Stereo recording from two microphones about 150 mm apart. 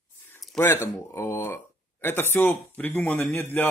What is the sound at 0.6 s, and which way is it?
Speech, 15° left (ahead or behind).